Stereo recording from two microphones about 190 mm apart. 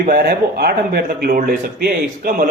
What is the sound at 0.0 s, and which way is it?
Speech, 55° right (ahead or behind).